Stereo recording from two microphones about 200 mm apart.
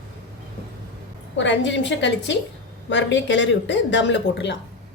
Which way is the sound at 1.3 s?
65° left (ahead or behind).